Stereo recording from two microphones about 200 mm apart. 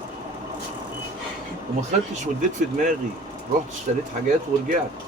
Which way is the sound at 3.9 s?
35° right (ahead or behind).